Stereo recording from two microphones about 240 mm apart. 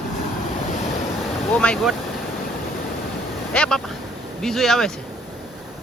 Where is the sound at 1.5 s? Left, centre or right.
Centre.